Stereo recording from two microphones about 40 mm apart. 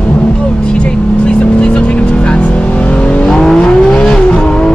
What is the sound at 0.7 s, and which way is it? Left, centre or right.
Vehicle, left.